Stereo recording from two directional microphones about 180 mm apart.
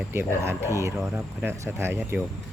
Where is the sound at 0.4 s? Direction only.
15° right (ahead or behind).